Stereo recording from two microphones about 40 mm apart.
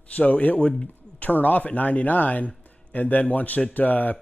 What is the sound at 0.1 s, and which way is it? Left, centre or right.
Speech, left.